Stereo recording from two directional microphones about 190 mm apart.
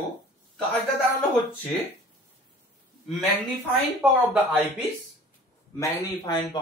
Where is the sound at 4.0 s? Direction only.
5° right (ahead or behind).